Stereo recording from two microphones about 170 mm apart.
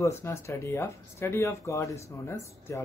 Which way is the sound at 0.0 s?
15° left (ahead or behind).